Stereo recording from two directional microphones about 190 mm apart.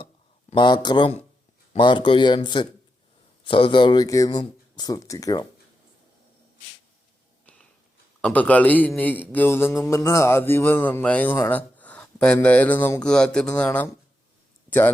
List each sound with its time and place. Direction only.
0.5 s speech: 25° left (ahead or behind)
8.2 s a man's voice: 10° left (ahead or behind)